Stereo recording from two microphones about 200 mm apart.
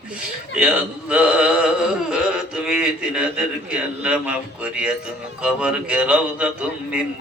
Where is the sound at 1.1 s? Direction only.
5° right (ahead or behind).